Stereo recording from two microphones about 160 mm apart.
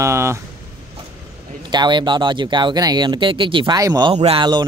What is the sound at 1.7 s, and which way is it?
Speech, 25° right (ahead or behind).